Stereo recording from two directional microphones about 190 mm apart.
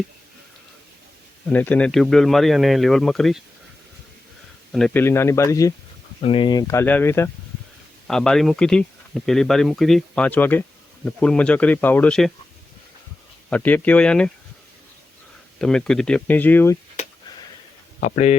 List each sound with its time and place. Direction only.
1.5 s speech: 10° left (ahead or behind)
4.7 s speech: centre (ahead or behind)
5.0 s speech: 15° left (ahead or behind)
6.2 s speech: 25° left (ahead or behind); by 12.3 s 5° left (ahead or behind)
13.5 s speech: 10° left (ahead or behind)
15.5 s speech: 5° left (ahead or behind)
18.0 s speech: 40° left (ahead or behind)